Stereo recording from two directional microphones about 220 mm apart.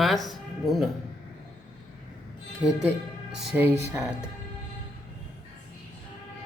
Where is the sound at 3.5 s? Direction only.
5° right (ahead or behind).